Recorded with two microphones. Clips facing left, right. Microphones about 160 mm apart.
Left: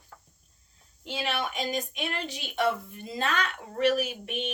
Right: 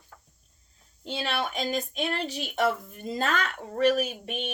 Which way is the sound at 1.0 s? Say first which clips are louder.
Right 1 dB; 35° right (ahead or behind).